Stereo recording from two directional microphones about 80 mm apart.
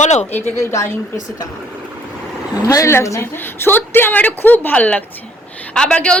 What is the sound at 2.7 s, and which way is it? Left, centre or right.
Speech, left.